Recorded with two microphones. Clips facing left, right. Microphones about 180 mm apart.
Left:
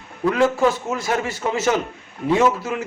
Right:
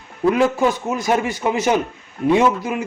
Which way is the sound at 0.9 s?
15° right (ahead or behind).